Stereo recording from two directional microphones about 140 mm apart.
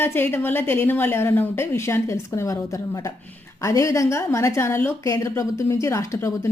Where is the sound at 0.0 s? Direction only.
15° left (ahead or behind).